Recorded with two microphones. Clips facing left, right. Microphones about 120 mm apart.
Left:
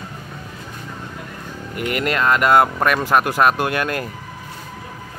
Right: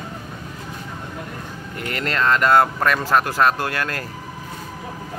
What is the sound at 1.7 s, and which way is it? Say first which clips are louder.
Speech: left 4 dB; 15° left (ahead or behind).